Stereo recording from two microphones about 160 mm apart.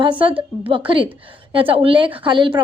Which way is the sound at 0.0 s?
30° right (ahead or behind).